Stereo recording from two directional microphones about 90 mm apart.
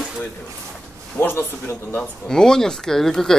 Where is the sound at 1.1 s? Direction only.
25° left (ahead or behind).